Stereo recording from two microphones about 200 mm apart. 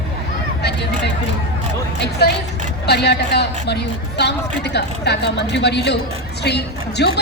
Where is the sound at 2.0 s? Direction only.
55° left (ahead or behind).